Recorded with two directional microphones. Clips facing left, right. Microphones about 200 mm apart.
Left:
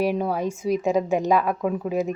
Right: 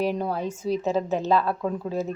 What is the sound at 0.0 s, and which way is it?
A woman's voice, 10° left (ahead or behind).